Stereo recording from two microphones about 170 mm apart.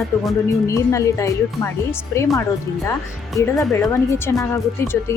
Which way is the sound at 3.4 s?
20° left (ahead or behind).